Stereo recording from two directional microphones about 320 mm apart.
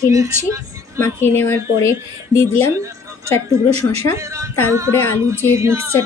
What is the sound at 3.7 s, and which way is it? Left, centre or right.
Speech, centre.